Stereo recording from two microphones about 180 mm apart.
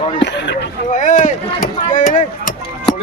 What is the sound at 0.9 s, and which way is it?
Speech, 45° left (ahead or behind).